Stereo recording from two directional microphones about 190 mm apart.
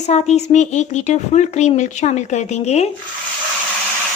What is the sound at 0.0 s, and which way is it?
Speech, 35° left (ahead or behind).